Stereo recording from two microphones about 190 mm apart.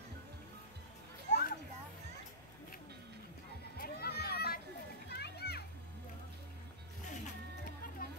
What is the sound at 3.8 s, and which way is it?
Children playing, 55° left (ahead or behind).